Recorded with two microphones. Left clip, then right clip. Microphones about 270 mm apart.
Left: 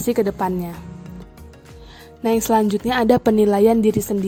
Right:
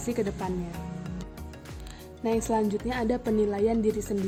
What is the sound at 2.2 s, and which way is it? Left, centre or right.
A woman's voice, left.